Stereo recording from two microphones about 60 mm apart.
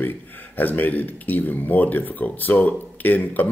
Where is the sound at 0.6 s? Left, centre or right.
Left.